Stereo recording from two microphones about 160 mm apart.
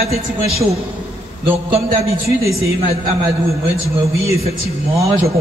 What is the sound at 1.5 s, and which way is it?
Speech, 35° right (ahead or behind).